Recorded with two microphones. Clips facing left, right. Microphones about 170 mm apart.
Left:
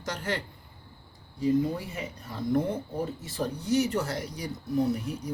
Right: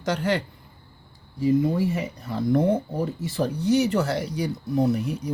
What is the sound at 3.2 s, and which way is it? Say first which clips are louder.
Speech: right 8 dB; 75° right (ahead or behind).